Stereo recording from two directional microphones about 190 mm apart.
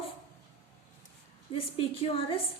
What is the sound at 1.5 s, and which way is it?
Speech, 30° left (ahead or behind).